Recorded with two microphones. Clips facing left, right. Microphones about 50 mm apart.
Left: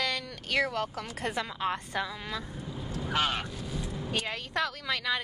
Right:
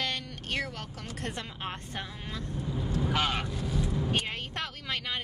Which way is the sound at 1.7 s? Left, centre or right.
Left.